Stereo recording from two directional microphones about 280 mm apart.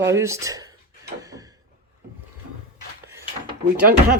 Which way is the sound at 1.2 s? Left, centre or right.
Centre.